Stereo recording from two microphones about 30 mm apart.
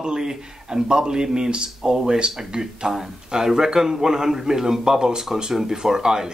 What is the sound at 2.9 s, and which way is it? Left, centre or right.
A man's voice, centre.